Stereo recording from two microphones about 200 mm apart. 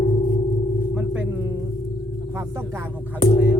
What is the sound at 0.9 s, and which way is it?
Speech, 5° right (ahead or behind).